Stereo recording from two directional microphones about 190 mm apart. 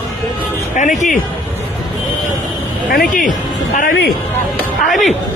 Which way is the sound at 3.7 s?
50° left (ahead or behind).